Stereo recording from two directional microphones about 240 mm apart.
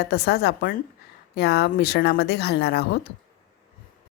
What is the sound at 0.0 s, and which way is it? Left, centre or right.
A woman's voice, left.